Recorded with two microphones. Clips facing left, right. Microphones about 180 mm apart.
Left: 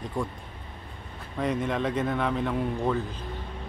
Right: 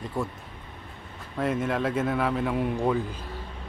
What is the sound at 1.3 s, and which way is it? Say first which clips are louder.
A man's voice: right 1 dB; 5° right (ahead or behind).